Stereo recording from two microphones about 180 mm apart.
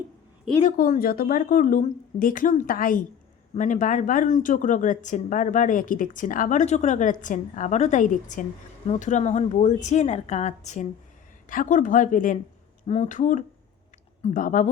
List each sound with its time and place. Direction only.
0.5 s speech: centre (ahead or behind)
0.8 s a woman's voice: 55° left (ahead or behind)